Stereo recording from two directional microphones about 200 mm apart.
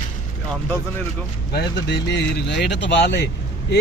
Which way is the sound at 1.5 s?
60° left (ahead or behind).